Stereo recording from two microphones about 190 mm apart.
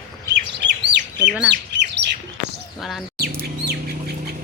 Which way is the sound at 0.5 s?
65° right (ahead or behind).